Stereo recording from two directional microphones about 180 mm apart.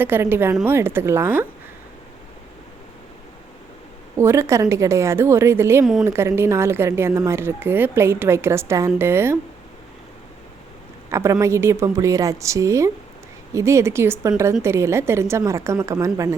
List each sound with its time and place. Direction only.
0.0 s speech: 10° right (ahead or behind)
4.2 s speech: 15° right (ahead or behind)
5.8 s a woman's voice: centre (ahead or behind)
6.1 s speech: 15° right (ahead or behind)
11.1 s speech: 15° right (ahead or behind)